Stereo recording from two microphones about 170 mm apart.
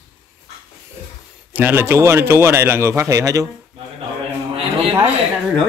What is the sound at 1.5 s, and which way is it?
Speech, 10° right (ahead or behind).